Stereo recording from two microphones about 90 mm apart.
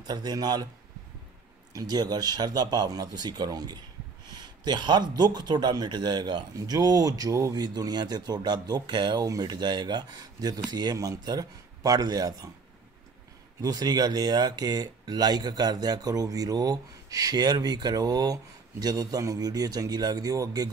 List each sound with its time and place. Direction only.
0.0 s speech: 50° right (ahead or behind)
1.7 s speech: 45° right (ahead or behind)
6.5 s speech: 45° right (ahead or behind)
7.6 s speech: 50° right (ahead or behind)
13.6 s speech: 45° right (ahead or behind)